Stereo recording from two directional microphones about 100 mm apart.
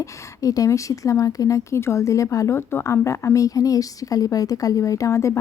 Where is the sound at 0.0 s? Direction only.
35° left (ahead or behind).